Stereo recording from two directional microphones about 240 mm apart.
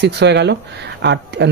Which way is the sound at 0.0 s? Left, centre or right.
Right.